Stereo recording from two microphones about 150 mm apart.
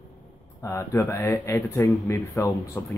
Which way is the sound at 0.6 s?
20° left (ahead or behind).